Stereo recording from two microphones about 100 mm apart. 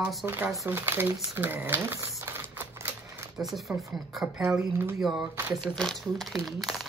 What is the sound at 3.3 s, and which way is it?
Speech, centre (ahead or behind).